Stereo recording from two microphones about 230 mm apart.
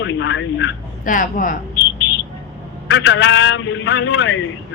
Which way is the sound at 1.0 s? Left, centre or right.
Left.